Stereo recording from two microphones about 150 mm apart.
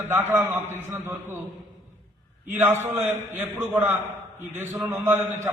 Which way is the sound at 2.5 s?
15° right (ahead or behind).